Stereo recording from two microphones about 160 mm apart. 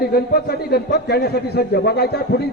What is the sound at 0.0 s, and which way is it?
A man's voice, 75° left (ahead or behind).